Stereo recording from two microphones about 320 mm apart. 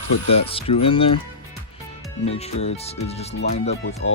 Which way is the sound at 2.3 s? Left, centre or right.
Centre.